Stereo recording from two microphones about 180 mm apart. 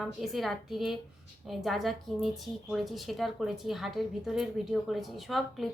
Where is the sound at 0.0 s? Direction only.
Centre (ahead or behind).